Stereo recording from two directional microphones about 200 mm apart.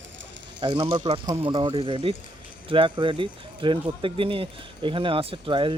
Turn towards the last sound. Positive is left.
turn(degrees=-25)  # may be behind; listen again after turning